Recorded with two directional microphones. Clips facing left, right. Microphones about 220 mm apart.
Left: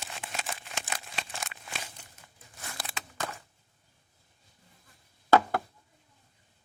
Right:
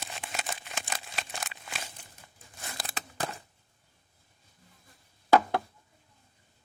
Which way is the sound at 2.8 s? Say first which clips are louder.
Right 2 dB; 40° right (ahead or behind).